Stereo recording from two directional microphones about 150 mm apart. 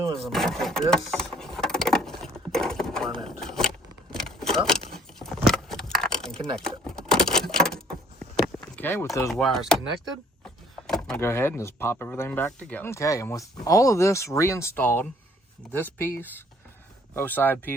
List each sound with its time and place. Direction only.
0.2 s vehicle: centre (ahead or behind)
4.9 s a sound: 5° left (ahead or behind)
9.3 s speech: 5° left (ahead or behind)
10.4 s vehicle: 5° left (ahead or behind)
11.2 s speech: 15° left (ahead or behind)